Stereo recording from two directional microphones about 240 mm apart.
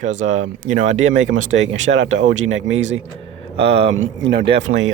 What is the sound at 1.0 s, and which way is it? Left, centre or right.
Speech, right.